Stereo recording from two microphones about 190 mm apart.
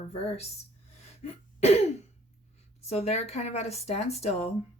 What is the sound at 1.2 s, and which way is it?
Throat clearing, 35° left (ahead or behind).